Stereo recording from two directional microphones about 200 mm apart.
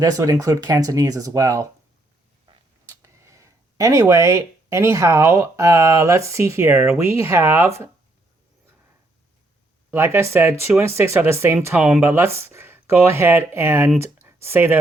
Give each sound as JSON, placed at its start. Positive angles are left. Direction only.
{"t": 0.0, "sound": "speech", "side_deg": -15}
{"t": 9.9, "sound": "speech", "side_deg": -10}